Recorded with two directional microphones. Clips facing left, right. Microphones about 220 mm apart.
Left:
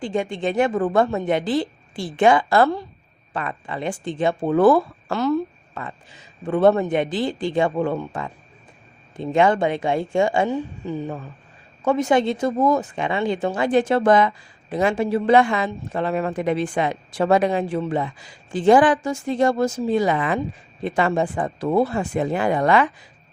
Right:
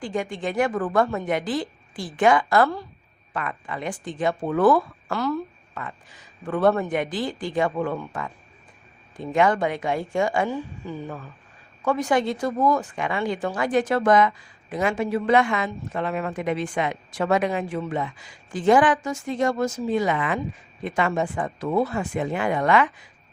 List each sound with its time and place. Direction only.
0.0 s speech: 25° left (ahead or behind)